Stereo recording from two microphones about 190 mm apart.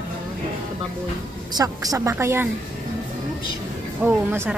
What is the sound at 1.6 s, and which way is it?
Speech, 20° right (ahead or behind).